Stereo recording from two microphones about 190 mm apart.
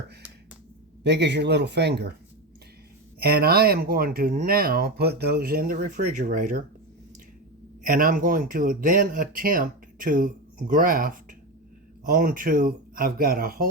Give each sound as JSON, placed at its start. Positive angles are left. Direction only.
{"t": 1.0, "sound": "speech", "side_deg": -65}
{"t": 3.2, "sound": "speech", "side_deg": -55}
{"t": 7.9, "sound": "speech", "side_deg": -45}